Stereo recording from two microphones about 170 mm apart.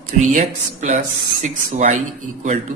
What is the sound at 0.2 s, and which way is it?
A man's voice, 45° right (ahead or behind).